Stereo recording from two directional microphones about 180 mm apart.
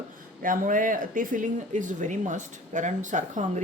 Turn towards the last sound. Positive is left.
turn(degrees=-45)  # may be behind; listen again after turning